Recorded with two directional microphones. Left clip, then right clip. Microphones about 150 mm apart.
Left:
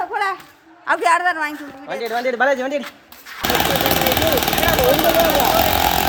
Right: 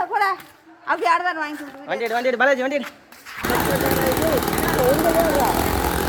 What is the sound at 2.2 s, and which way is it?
Speech, 20° right (ahead or behind).